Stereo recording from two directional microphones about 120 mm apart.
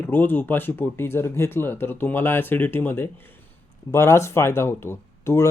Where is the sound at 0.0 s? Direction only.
15° left (ahead or behind).